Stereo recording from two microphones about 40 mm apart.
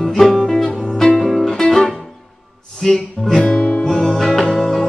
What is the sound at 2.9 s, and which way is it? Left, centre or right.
Music, centre.